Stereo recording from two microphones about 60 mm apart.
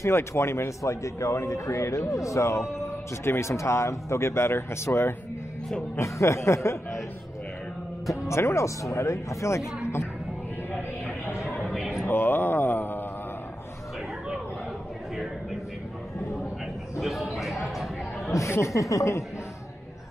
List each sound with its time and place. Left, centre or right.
0.0 s speech: left
5.9 s speech: left
8.1 s speech: left
10.7 s a sound: left
12.1 s mantra: left
17.0 s a sound: centre
18.3 s speech: left